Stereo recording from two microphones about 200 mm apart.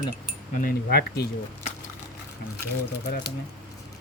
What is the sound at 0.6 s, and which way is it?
Speech, 50° left (ahead or behind).